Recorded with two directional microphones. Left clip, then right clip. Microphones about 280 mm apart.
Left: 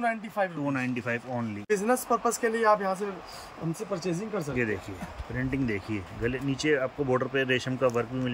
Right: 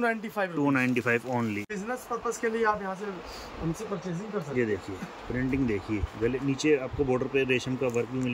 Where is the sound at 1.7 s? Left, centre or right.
Left.